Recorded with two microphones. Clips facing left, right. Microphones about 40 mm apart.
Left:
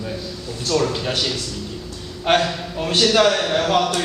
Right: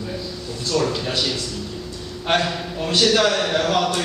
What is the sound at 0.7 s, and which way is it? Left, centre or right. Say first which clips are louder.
Speech: left 1 dB; centre.